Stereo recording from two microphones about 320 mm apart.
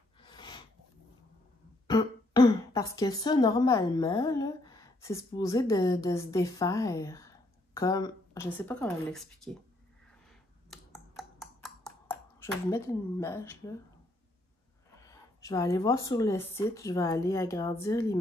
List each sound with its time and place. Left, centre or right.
0.2 s snort: centre
1.9 s speech: centre
10.7 s a sound: centre
15.0 s speech: centre